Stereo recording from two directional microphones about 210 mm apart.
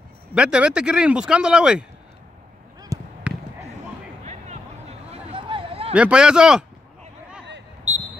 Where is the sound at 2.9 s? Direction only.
15° right (ahead or behind).